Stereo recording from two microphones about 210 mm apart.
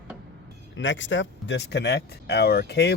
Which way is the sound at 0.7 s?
60° left (ahead or behind).